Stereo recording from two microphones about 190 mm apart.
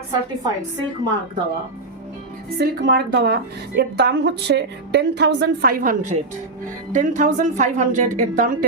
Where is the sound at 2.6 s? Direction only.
60° right (ahead or behind).